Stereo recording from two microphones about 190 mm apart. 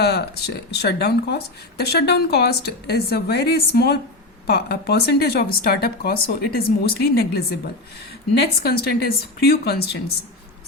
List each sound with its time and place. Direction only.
0.0 s speech: 60° left (ahead or behind)